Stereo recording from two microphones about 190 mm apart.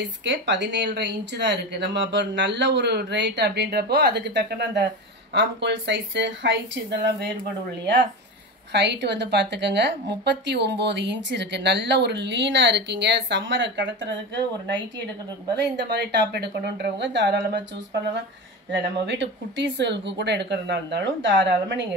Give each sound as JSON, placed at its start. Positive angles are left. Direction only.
{"t": 0.0, "sound": "a woman's voice", "side_deg": -70}
{"t": 8.7, "sound": "a woman's voice", "side_deg": -65}